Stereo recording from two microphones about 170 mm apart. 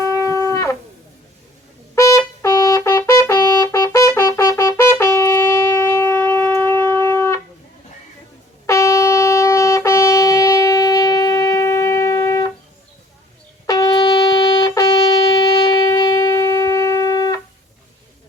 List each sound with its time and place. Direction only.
0.0 s shofar: 15° left (ahead or behind)
2.0 s trumpet: 15° left (ahead or behind)
8.6 s shofar: 15° left (ahead or behind)
13.7 s shofar: 20° left (ahead or behind)